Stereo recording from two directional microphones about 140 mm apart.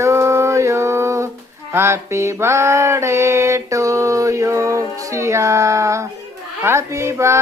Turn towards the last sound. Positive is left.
turn(degrees=-20)  # may be behind; listen again after turning